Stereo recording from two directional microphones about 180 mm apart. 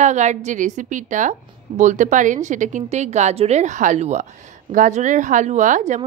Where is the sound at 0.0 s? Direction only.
40° right (ahead or behind).